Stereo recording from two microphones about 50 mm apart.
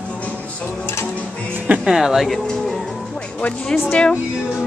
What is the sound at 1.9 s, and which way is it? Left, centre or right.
Speech, centre.